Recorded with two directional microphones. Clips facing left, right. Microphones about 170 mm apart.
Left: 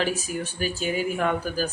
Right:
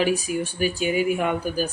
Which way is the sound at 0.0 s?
15° right (ahead or behind).